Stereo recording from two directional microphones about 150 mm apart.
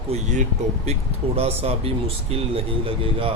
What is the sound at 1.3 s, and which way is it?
Speech, 40° right (ahead or behind).